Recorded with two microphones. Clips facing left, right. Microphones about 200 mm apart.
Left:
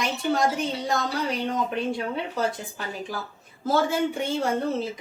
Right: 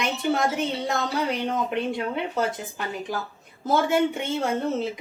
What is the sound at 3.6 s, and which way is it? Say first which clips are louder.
Speech: right 1 dB; 20° right (ahead or behind).